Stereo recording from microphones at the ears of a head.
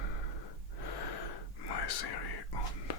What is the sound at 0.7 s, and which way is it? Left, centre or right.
Gasp, left.